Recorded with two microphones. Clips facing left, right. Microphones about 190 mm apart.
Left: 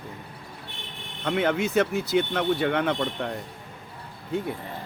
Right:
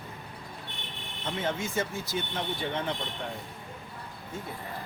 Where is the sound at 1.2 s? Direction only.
70° left (ahead or behind).